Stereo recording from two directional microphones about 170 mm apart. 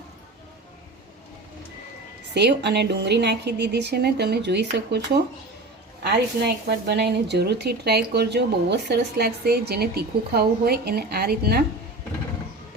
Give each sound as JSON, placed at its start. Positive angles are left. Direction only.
{"t": 2.3, "sound": "a woman's voice", "side_deg": -80}
{"t": 6.0, "sound": "speech", "side_deg": -75}